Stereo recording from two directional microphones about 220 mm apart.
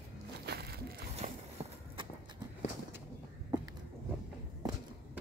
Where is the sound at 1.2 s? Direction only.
35° right (ahead or behind).